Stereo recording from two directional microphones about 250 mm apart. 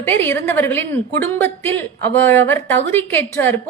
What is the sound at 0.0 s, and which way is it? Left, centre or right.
A woman's voice, centre.